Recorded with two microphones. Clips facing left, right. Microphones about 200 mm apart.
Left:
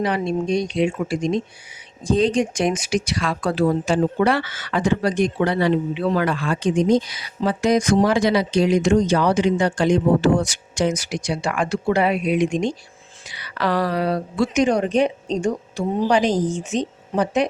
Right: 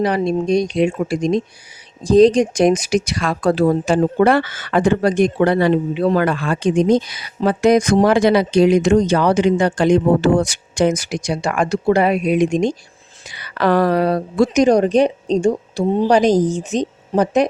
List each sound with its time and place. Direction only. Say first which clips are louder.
0.0 s speech: right 4 dB; 40° right (ahead or behind)